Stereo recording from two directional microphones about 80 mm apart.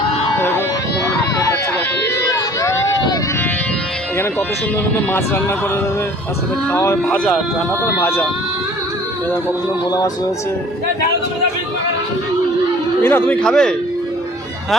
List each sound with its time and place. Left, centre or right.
2.0 s a sound: left
4.9 s speech: left
6.7 s speech: left
13.0 s speech: left
13.4 s speech: centre